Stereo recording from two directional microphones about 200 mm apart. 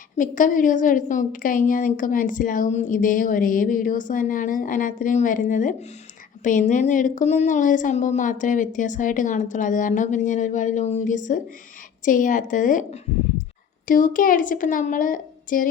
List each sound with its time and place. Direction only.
0.2 s a woman's voice: 40° left (ahead or behind)